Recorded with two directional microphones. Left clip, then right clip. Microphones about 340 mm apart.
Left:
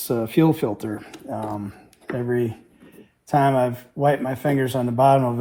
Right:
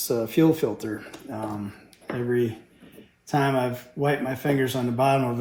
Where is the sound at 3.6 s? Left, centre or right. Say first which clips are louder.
Left 5 dB; centre.